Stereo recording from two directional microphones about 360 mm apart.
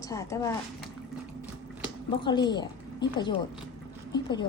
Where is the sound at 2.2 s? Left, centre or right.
Centre.